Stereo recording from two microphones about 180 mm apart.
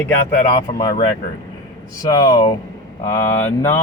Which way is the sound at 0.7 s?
25° left (ahead or behind).